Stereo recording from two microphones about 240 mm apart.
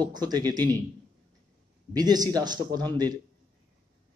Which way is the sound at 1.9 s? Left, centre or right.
Centre.